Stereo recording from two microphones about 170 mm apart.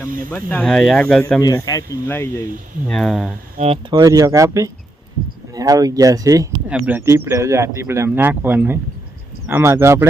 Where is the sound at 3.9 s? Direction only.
20° right (ahead or behind).